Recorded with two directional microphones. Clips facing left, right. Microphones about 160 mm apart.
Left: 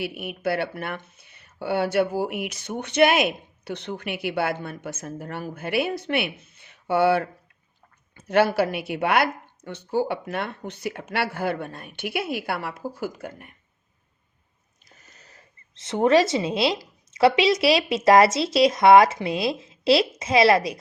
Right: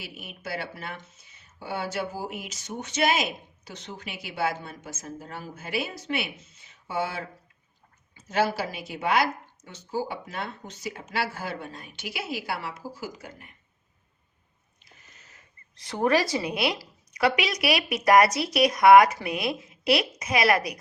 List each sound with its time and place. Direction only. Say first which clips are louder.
0.0 s speech: left 12 dB; 60° left (ahead or behind)
14.8 s a sound: left 3 dB; 40° left (ahead or behind)
15.7 s a woman's voice: left 5 dB; 20° left (ahead or behind)